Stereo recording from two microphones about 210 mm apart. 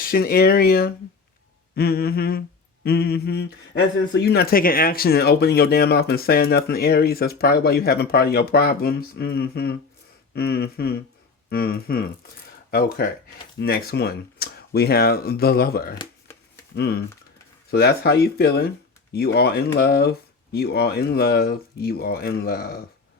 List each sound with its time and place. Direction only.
0.0 s speech: 45° left (ahead or behind)